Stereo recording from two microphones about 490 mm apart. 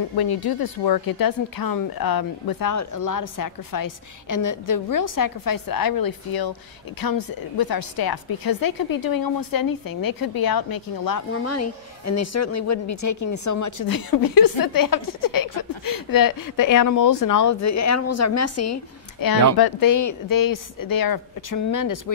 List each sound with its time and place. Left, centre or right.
0.1 s a woman's voice: left
11.3 s a woman's voice: left